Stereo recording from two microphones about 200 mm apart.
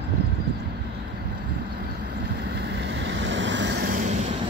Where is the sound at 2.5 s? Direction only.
60° right (ahead or behind); by 4.1 s 40° right (ahead or behind).